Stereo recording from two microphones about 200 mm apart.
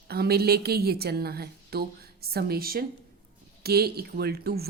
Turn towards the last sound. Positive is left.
turn(degrees=-50)  # may be behind; listen again after turning